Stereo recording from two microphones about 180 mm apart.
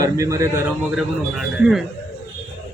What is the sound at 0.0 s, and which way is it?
Speech, 15° right (ahead or behind).